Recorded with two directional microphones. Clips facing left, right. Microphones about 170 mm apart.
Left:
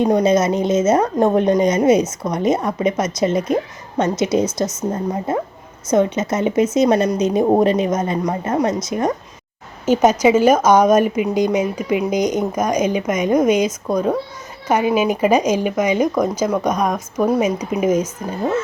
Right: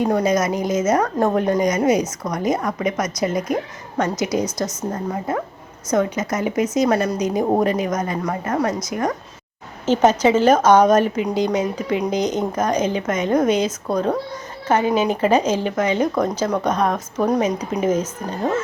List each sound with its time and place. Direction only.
0.0 s a woman's voice: 25° left (ahead or behind)
9.8 s speech: 10° left (ahead or behind)